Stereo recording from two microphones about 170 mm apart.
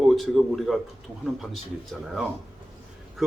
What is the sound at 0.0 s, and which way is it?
A man's voice, centre (ahead or behind).